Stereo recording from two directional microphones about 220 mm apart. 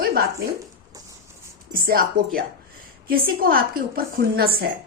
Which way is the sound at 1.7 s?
40° right (ahead or behind).